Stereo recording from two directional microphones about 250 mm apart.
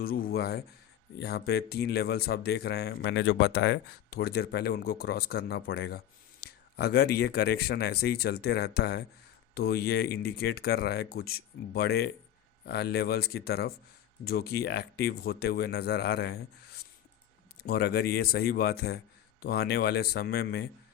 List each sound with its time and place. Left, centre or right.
0.0 s speech: left